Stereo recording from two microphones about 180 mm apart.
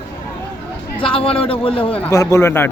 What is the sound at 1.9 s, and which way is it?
Speech, 10° left (ahead or behind).